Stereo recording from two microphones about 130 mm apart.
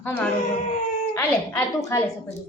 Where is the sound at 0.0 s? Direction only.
15° left (ahead or behind).